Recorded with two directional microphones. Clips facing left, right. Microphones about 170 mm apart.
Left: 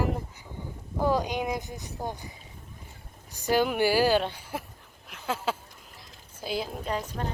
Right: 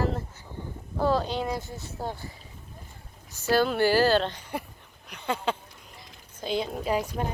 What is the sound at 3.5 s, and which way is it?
A woman's voice, 15° left (ahead or behind).